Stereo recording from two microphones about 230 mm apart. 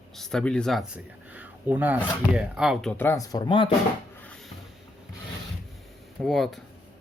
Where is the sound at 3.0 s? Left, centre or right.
Centre.